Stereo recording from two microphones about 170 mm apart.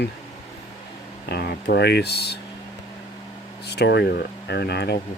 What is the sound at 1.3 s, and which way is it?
Speech, 70° left (ahead or behind).